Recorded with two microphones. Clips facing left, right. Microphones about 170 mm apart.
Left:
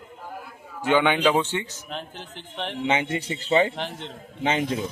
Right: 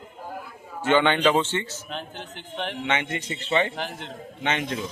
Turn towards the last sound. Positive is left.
turn(degrees=30)  # may be behind; listen again after turning